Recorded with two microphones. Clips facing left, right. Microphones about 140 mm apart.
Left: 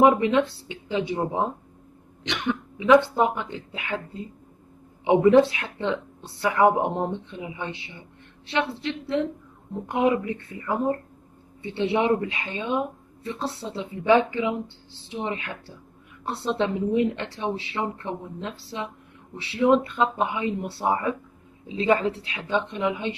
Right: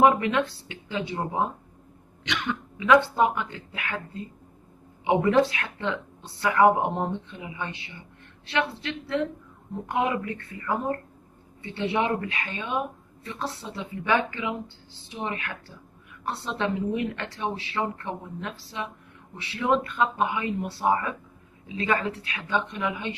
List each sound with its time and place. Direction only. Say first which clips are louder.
0.0 s speech: left 2 dB; 20° left (ahead or behind)